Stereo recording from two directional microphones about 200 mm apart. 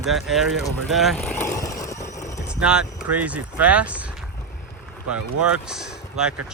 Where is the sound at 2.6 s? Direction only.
5° right (ahead or behind).